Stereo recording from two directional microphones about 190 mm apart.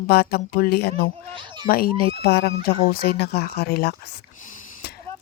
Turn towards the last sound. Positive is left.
turn(degrees=50)  # may be behind; listen again after turning